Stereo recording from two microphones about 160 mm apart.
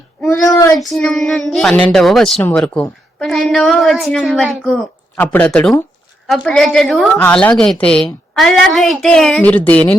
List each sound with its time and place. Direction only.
0.3 s speech: 15° left (ahead or behind)
0.8 s a woman's voice: 5° left (ahead or behind)
5.1 s a woman's voice: 10° left (ahead or behind)